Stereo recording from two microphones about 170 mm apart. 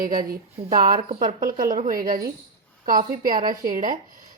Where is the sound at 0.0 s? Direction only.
55° right (ahead or behind).